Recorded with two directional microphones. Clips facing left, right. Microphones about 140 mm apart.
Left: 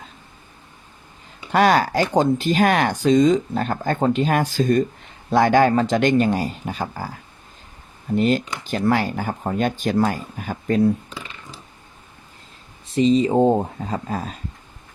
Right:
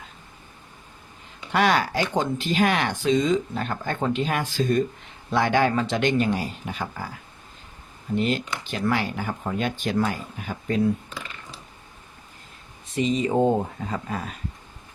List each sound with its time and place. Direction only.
1.5 s speech: 40° left (ahead or behind)
8.2 s speech: 40° left (ahead or behind)
12.9 s speech: 30° left (ahead or behind)